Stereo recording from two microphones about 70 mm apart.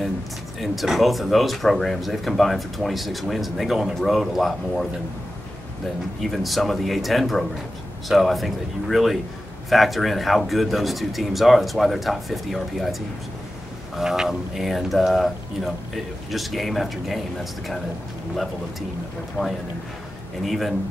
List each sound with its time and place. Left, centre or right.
0.6 s speech: centre
6.2 s speech: centre
13.9 s speech: centre
19.4 s speech: right
20.4 s speech: centre